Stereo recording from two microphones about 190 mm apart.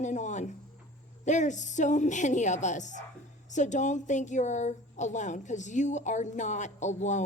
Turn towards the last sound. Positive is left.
turn(degrees=40)  # may be behind; listen again after turning